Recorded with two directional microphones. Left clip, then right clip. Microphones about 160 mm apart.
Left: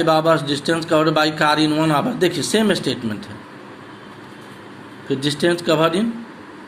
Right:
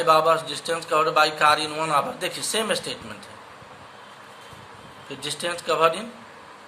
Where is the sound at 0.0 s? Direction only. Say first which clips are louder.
Left 2 dB; 15° left (ahead or behind).